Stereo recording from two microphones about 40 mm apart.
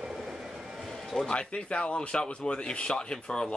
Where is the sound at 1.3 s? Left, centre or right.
Left.